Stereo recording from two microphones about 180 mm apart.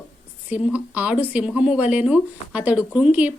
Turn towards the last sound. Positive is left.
turn(degrees=-10)  # may be behind; listen again after turning